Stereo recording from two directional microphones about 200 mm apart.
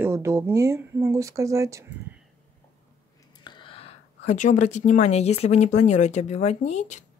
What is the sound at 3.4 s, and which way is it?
Speech, 25° left (ahead or behind).